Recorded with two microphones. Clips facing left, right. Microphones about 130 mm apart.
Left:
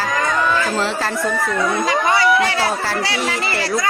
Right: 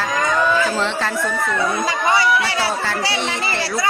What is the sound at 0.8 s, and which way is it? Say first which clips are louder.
Speech: left 1 dB; 5° left (ahead or behind).